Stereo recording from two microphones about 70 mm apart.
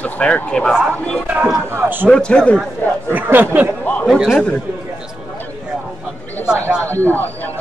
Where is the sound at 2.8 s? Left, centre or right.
Left.